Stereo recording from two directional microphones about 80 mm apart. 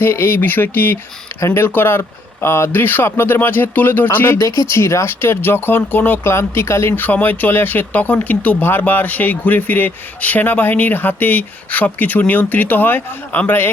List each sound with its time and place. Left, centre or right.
0.0 s speech: left